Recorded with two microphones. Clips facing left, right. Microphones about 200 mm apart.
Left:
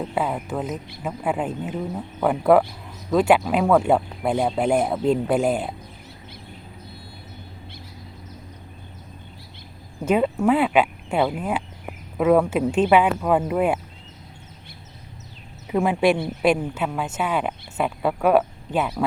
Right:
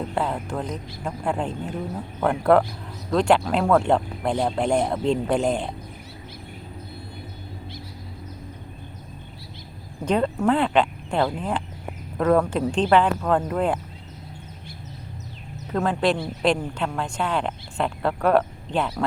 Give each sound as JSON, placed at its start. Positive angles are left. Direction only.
{"t": 0.1, "sound": "speech", "side_deg": 5}
{"t": 10.0, "sound": "speech", "side_deg": 5}
{"t": 15.7, "sound": "speech", "side_deg": 10}